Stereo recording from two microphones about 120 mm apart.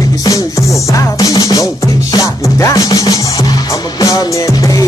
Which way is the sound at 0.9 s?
30° left (ahead or behind).